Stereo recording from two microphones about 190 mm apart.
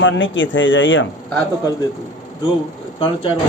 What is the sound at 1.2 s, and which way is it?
Speech, 10° left (ahead or behind).